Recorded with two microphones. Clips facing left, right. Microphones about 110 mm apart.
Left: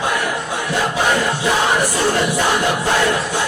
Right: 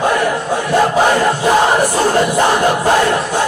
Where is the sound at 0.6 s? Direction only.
45° right (ahead or behind).